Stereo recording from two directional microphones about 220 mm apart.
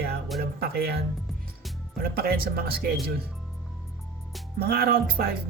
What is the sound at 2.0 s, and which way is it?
Music, 45° right (ahead or behind).